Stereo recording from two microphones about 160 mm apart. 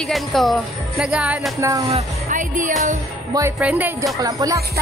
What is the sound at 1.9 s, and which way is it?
Speech, 40° right (ahead or behind).